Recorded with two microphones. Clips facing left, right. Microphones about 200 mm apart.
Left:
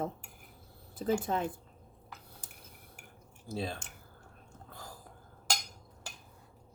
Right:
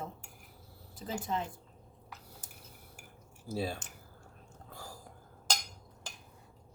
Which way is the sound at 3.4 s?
5° right (ahead or behind).